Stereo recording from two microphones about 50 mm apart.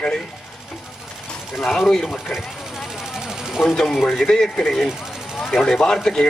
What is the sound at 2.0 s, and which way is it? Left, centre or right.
Speech, centre.